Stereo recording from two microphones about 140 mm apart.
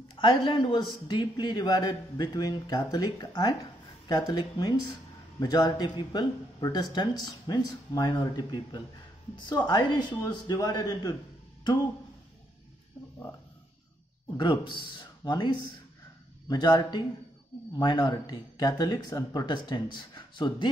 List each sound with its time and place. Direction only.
0.1 s a sound: 35° left (ahead or behind)
0.5 s speech: 35° left (ahead or behind)
14.3 s speech: 35° left (ahead or behind)